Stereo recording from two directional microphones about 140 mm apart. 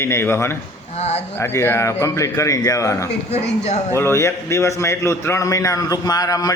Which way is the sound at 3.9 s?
20° left (ahead or behind).